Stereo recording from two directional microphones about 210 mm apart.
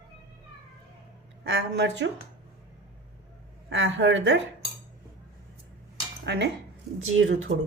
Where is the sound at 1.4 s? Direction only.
50° right (ahead or behind).